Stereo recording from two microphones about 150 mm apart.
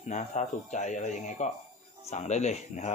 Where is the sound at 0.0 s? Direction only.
50° left (ahead or behind).